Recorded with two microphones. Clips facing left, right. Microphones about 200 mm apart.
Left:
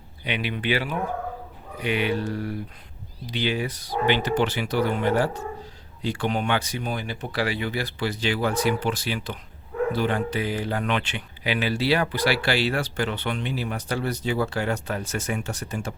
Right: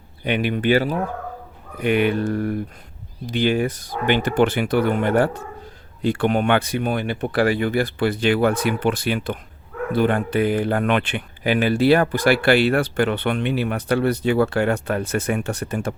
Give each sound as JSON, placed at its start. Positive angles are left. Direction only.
{"t": 0.3, "sound": "speech", "side_deg": -50}